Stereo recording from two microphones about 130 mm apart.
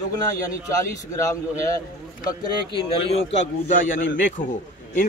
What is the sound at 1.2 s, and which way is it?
A man's voice, 25° left (ahead or behind).